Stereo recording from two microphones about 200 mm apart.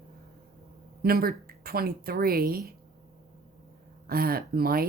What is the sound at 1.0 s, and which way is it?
A woman's voice, 50° right (ahead or behind).